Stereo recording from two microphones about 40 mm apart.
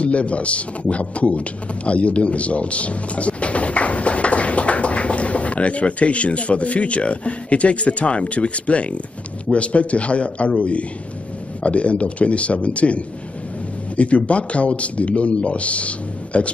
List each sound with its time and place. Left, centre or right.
0.0 s a man's voice: left